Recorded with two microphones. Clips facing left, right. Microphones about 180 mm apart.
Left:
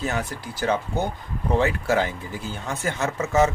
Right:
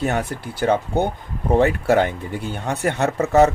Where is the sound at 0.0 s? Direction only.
60° right (ahead or behind).